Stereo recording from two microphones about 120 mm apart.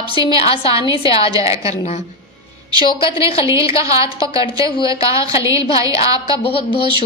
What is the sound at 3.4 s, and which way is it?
Speech, 25° right (ahead or behind).